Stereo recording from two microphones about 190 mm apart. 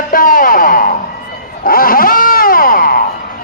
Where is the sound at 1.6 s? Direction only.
50° left (ahead or behind).